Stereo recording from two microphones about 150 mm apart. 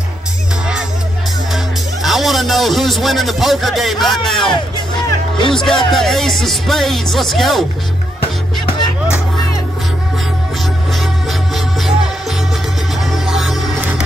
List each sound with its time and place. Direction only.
1.5 s music: centre (ahead or behind)
5.5 s speech: 5° left (ahead or behind)
8.5 s music: 30° left (ahead or behind)
11.0 s music: centre (ahead or behind)